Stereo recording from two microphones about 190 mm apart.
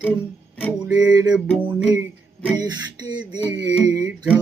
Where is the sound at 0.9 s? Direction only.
20° right (ahead or behind).